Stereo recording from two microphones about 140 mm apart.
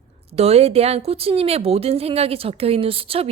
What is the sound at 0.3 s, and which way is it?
A woman's voice, 50° right (ahead or behind).